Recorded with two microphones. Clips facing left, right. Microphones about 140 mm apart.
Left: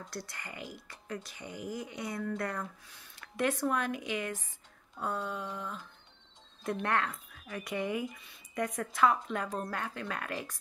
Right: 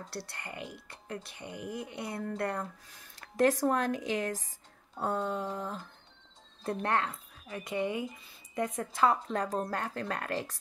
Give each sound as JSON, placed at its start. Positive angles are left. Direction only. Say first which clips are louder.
{"t": 0.1, "sound": "speech", "louder": "right 2 dB", "side_deg": -30}